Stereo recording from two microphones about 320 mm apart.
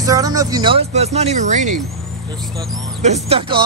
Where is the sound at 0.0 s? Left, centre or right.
Centre.